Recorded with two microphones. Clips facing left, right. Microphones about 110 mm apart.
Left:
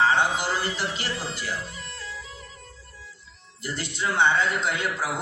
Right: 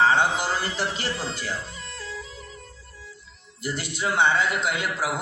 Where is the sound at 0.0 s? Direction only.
20° right (ahead or behind).